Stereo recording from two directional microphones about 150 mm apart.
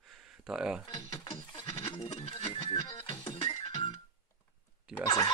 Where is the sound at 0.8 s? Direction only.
30° left (ahead or behind).